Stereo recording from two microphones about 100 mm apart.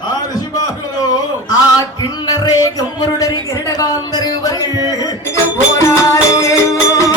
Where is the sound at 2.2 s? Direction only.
40° left (ahead or behind).